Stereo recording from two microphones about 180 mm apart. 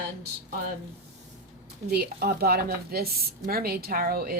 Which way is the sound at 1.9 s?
60° right (ahead or behind).